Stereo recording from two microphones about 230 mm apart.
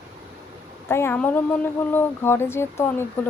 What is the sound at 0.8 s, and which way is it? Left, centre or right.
Speech, centre.